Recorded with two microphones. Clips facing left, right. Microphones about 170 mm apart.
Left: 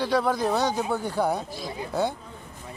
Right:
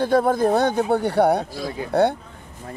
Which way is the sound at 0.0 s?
50° right (ahead or behind).